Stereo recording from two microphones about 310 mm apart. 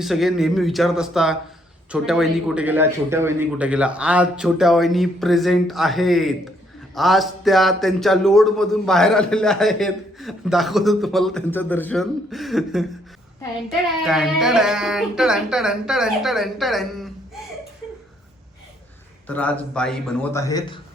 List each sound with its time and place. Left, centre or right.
0.0 s a man's voice: centre
19.3 s a man's voice: centre